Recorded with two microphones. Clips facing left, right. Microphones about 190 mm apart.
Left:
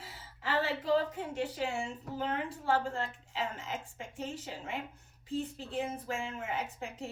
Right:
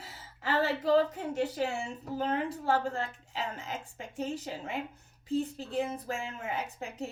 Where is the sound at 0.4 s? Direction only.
40° right (ahead or behind).